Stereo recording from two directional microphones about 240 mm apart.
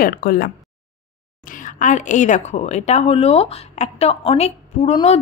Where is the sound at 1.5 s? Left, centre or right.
Left.